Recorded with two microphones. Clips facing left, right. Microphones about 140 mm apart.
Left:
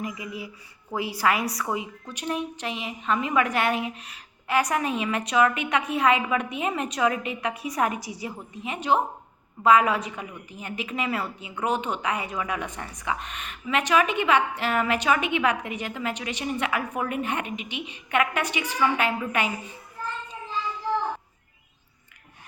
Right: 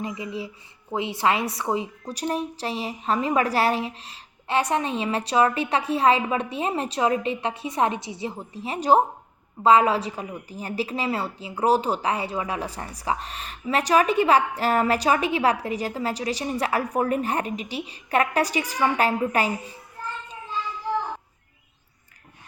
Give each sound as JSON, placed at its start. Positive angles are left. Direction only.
{"t": 0.0, "sound": "a woman's voice", "side_deg": -30}